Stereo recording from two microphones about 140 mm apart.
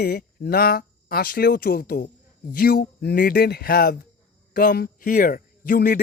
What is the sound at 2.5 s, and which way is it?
Speech, 90° left.